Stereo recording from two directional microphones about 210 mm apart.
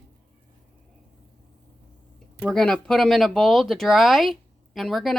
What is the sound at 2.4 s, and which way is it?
Speech, 5° left (ahead or behind).